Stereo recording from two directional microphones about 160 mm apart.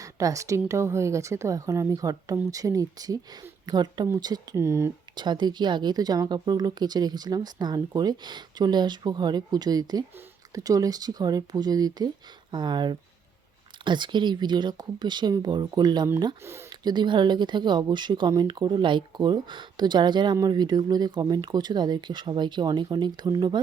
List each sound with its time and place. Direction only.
0.0 s speech: 20° right (ahead or behind)
5.1 s speech: 30° right (ahead or behind)
16.4 s speech: 15° right (ahead or behind)